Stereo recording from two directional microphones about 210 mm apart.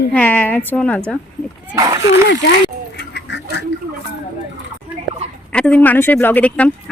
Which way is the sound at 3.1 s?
55° left (ahead or behind).